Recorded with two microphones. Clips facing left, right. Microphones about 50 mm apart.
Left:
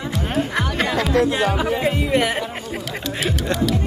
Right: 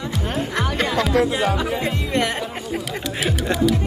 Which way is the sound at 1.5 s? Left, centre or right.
Centre.